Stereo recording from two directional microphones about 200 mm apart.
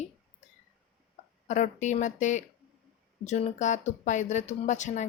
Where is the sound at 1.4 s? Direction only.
35° left (ahead or behind).